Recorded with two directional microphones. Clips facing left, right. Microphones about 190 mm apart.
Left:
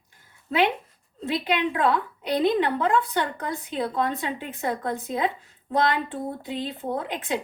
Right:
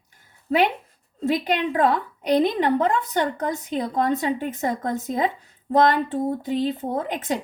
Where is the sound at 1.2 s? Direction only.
45° right (ahead or behind).